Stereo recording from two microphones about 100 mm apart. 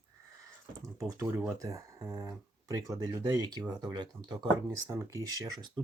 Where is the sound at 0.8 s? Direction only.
35° right (ahead or behind).